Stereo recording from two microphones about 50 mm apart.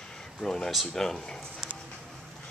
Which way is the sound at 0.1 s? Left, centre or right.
Centre.